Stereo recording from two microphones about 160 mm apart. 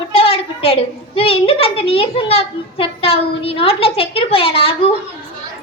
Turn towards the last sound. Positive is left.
turn(degrees=35)  # may be behind; listen again after turning